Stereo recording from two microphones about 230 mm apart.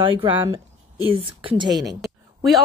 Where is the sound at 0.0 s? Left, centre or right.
Right.